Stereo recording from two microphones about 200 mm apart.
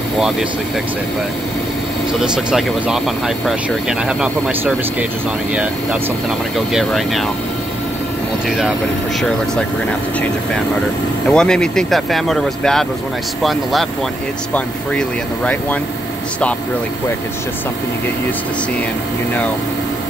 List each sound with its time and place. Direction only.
2.1 s speech: 5° right (ahead or behind)
8.5 s speech: centre (ahead or behind)